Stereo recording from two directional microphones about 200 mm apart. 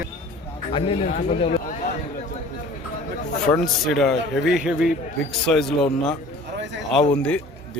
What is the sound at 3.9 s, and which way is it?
A man's voice, centre (ahead or behind).